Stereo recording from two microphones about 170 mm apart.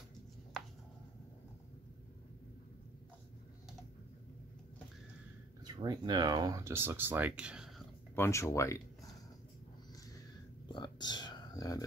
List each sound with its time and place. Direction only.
5.6 s speech: 25° right (ahead or behind); by 7.7 s 5° right (ahead or behind)
8.2 s speech: 15° left (ahead or behind)
10.7 s a sound: 25° left (ahead or behind)